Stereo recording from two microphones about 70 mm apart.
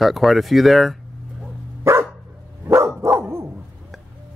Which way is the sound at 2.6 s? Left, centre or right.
Right.